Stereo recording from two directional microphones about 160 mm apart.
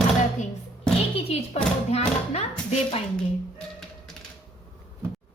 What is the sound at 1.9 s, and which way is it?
Thump, 40° left (ahead or behind).